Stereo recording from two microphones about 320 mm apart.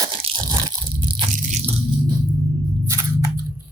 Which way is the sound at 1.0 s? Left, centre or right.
Right.